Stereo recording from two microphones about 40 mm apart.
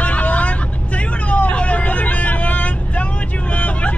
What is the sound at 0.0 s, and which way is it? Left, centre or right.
Vehicle, left.